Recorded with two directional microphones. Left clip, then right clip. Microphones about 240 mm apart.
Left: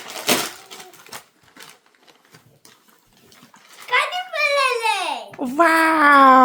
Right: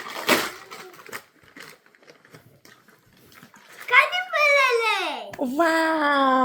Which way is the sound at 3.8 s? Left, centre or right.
Centre.